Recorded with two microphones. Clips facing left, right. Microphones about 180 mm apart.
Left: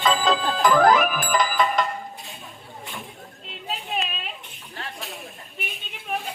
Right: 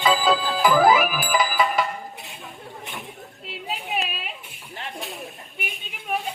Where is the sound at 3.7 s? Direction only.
5° right (ahead or behind).